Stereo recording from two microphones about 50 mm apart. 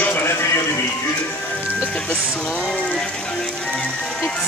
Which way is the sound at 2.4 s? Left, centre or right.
Left.